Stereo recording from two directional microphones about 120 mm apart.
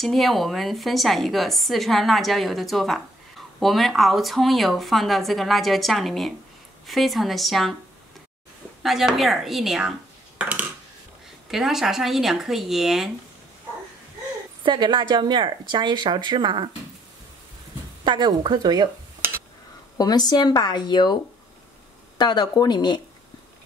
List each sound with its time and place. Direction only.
0.0 s a woman's voice: centre (ahead or behind)
8.8 s a woman's voice: centre (ahead or behind)
10.3 s a sound: 15° right (ahead or behind)
11.4 s a woman's voice: 5° right (ahead or behind)
14.6 s speech: 40° right (ahead or behind)
18.0 s speech: 40° right (ahead or behind)
20.0 s speech: 35° left (ahead or behind)
22.2 s speech: 35° left (ahead or behind)